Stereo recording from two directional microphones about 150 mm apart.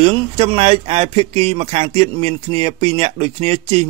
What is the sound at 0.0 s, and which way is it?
Speech, 40° right (ahead or behind).